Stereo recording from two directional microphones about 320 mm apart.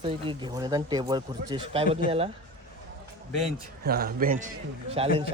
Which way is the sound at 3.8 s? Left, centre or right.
Right.